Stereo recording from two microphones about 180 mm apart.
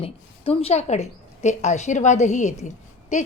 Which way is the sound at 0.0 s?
30° left (ahead or behind).